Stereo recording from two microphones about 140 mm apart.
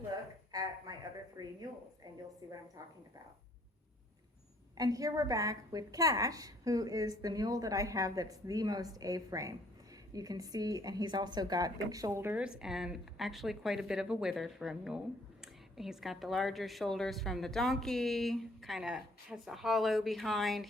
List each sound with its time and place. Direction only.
0.5 s a sound: 25° right (ahead or behind)
2.4 s a woman's voice: 30° right (ahead or behind)
4.8 s a woman's voice: 25° right (ahead or behind); by 20.7 s centre (ahead or behind)